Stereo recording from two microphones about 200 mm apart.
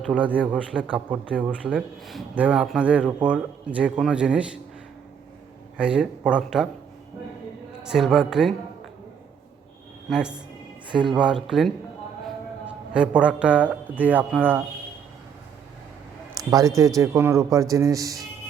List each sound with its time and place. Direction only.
0.1 s speech: 5° right (ahead or behind)
5.7 s speech: 5° right (ahead or behind)
7.9 s speech: centre (ahead or behind)
10.1 s speech: 5° right (ahead or behind)
16.4 s speech: 20° right (ahead or behind)